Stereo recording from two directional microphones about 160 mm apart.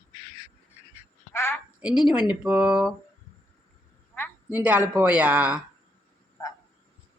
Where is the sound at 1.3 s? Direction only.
15° left (ahead or behind).